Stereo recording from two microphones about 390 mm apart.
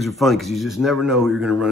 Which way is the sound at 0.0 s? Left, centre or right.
Centre.